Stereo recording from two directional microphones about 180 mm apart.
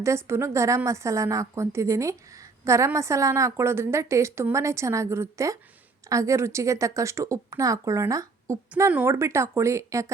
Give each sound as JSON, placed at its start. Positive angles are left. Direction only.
{"t": 0.0, "sound": "a woman's voice", "side_deg": -15}